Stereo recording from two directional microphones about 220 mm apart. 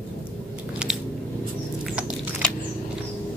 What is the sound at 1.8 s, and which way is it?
Chewing, 5° right (ahead or behind).